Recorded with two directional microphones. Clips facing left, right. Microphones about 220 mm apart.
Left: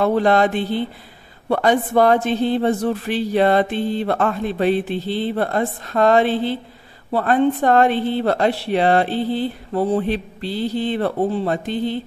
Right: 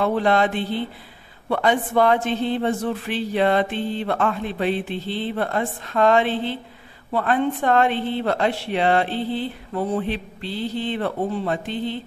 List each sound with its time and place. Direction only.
0.0 s speech: 40° left (ahead or behind)